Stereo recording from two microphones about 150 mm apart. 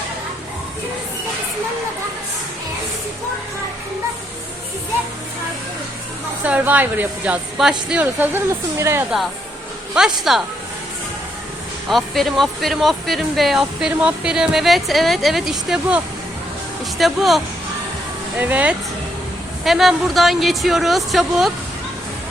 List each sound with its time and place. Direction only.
6.4 s a woman's voice: 10° right (ahead or behind)
10.0 s speech: 5° right (ahead or behind)
11.9 s speech: centre (ahead or behind)
17.0 s speech: centre (ahead or behind)
18.3 s a woman's voice: 10° right (ahead or behind)